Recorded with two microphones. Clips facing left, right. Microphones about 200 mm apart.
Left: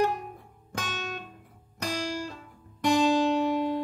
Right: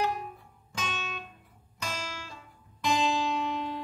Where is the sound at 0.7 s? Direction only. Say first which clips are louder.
Left 2 dB; 50° left (ahead or behind).